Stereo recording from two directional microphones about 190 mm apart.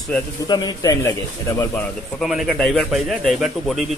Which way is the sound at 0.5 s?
20° left (ahead or behind).